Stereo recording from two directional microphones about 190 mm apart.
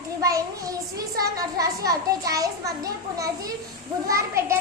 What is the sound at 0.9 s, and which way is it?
A child's voice, 20° right (ahead or behind).